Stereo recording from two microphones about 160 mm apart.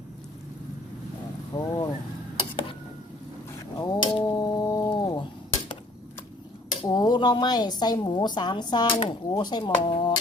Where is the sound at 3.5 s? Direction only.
25° left (ahead or behind).